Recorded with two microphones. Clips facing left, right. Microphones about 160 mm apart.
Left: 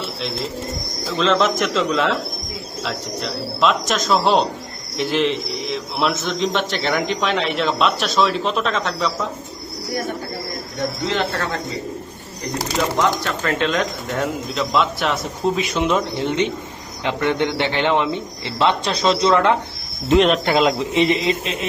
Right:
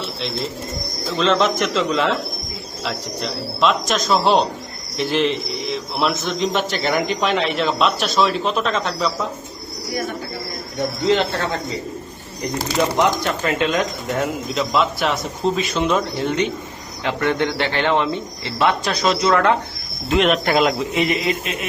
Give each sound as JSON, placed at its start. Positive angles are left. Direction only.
{"t": 1.1, "sound": "a man's voice", "side_deg": 0}
{"t": 3.2, "sound": "a man's voice", "side_deg": 0}
{"t": 12.5, "sound": "speech", "side_deg": -15}
{"t": 15.5, "sound": "speech", "side_deg": 15}
{"t": 20.1, "sound": "a man's voice", "side_deg": 0}
{"t": 20.9, "sound": "speech", "side_deg": 25}